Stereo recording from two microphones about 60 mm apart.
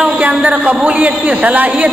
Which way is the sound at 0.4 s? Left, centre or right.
Right.